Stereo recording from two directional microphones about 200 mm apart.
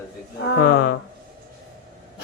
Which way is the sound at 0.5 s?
55° left (ahead or behind).